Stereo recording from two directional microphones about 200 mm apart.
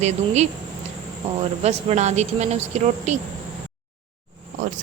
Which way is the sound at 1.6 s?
35° right (ahead or behind).